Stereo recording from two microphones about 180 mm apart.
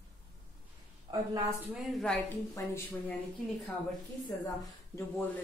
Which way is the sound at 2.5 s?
15° left (ahead or behind).